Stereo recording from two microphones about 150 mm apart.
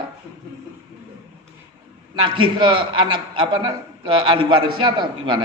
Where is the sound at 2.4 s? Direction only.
35° right (ahead or behind).